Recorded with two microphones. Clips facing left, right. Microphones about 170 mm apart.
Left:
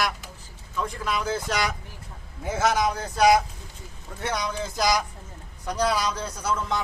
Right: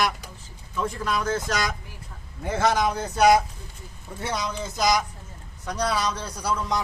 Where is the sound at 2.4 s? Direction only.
5° left (ahead or behind).